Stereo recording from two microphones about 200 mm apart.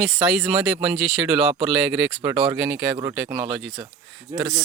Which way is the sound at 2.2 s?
15° right (ahead or behind).